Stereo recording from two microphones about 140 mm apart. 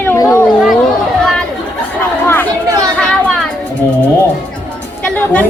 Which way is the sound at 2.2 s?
15° left (ahead or behind).